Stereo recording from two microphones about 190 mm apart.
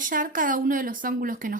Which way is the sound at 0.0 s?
45° right (ahead or behind).